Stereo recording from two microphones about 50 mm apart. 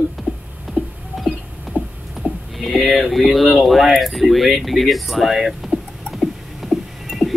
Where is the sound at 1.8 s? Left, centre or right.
Right.